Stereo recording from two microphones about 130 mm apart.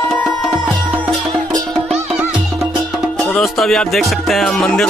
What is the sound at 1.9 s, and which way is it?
Music, 5° right (ahead or behind).